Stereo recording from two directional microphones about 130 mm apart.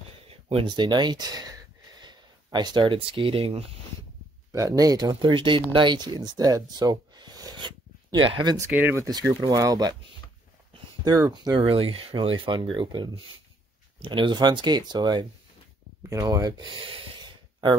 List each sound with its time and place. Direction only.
0.3 s a sound: 50° right (ahead or behind)
0.7 s speech: 35° right (ahead or behind)
4.5 s speech: 25° right (ahead or behind)
8.5 s speech: 15° right (ahead or behind)
9.4 s speech: 30° right (ahead or behind)
11.1 s speech: 25° right (ahead or behind)
11.5 s speech: 45° right (ahead or behind)